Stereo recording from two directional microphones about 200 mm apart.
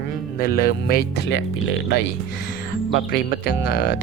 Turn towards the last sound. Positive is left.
turn(degrees=50)  # may be behind; listen again after turning